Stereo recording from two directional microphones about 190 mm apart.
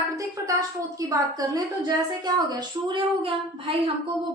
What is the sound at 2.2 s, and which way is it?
A woman's voice, 20° right (ahead or behind).